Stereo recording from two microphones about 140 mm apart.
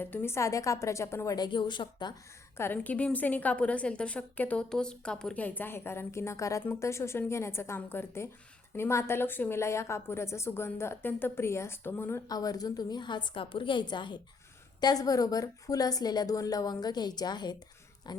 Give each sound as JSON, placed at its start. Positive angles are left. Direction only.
{"t": 0.0, "sound": "a woman's voice", "side_deg": 15}
{"t": 2.6, "sound": "a woman's voice", "side_deg": 15}
{"t": 12.3, "sound": "a woman's voice", "side_deg": 25}